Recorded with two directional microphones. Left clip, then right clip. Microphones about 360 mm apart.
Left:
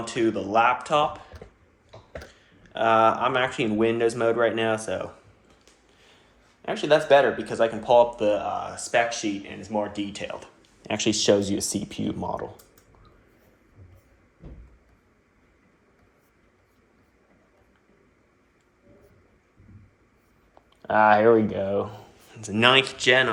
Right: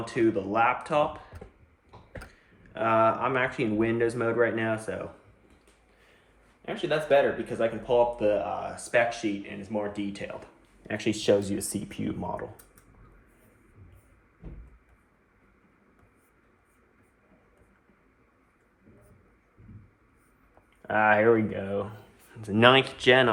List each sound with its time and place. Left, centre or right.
0.1 s speech: centre
2.7 s speech: centre
6.7 s speech: centre
20.8 s speech: centre
22.4 s speech: centre